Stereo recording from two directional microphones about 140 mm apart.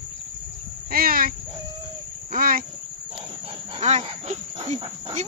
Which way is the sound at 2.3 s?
90° right.